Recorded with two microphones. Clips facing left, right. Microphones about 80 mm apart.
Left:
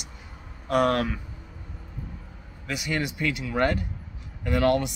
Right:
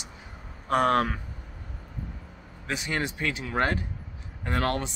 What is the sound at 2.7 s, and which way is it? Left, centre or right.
Speech, right.